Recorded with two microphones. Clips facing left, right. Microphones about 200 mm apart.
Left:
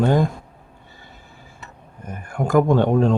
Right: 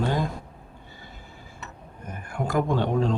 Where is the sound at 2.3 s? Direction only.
50° left (ahead or behind).